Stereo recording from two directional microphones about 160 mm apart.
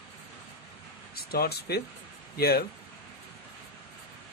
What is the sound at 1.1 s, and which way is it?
Speech, 70° left (ahead or behind).